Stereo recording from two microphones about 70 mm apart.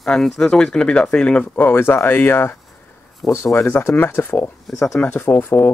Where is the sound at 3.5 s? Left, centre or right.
Left.